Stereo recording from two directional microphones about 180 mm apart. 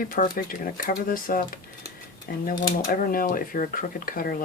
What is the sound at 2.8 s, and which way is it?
Speech, 50° left (ahead or behind).